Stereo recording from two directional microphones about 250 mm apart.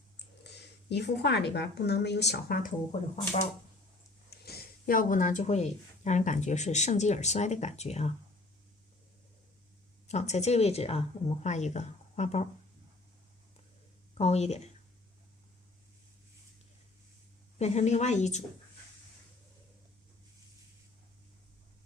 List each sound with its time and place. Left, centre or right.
0.4 s a woman's voice: left
4.3 s speech: left
10.1 s speech: left
14.2 s speech: left
17.6 s speech: left